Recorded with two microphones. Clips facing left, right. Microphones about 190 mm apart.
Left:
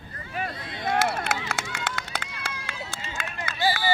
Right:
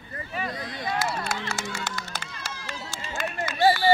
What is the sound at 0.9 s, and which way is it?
Run, 50° left (ahead or behind).